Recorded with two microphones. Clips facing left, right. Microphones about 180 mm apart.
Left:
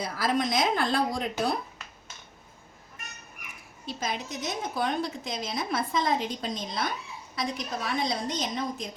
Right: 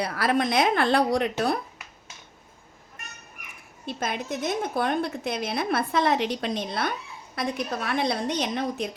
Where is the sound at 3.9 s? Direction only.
55° right (ahead or behind).